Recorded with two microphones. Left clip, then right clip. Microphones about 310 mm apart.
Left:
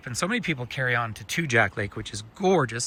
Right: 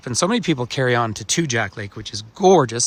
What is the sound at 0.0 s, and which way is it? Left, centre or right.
Speech, centre.